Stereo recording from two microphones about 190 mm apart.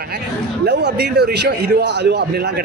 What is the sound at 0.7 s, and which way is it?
A man's voice, 60° right (ahead or behind).